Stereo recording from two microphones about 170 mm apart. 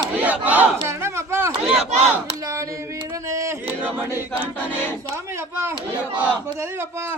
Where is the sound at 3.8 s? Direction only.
10° right (ahead or behind).